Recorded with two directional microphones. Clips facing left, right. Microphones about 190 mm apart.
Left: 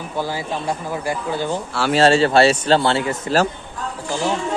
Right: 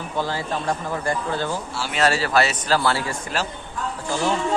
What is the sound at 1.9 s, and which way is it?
A man's voice, 30° left (ahead or behind).